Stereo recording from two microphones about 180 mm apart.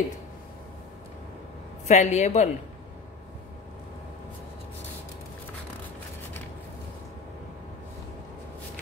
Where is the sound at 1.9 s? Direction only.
40° left (ahead or behind).